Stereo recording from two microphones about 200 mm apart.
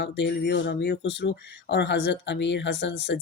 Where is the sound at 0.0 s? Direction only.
60° left (ahead or behind).